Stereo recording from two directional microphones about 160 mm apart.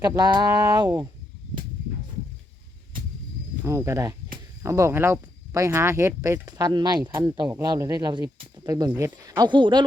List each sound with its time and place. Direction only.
0.0 s speech: 25° right (ahead or behind)
3.6 s speech: 15° right (ahead or behind)
8.5 s a sound: 25° right (ahead or behind)
9.0 s speech: 20° right (ahead or behind)